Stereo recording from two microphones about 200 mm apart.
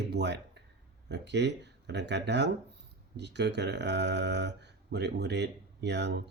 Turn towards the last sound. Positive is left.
turn(degrees=-55)  # may be behind; listen again after turning